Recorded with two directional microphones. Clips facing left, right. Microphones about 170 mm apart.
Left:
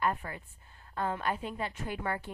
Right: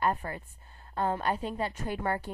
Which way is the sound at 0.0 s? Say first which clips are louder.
Right 2 dB; 40° right (ahead or behind).